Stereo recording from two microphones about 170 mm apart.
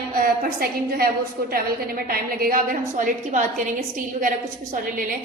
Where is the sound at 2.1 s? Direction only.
60° right (ahead or behind).